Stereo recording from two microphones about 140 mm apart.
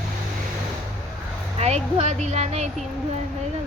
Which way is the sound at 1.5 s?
50° right (ahead or behind).